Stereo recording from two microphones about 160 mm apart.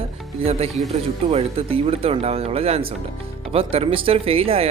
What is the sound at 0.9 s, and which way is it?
Speech, 40° right (ahead or behind).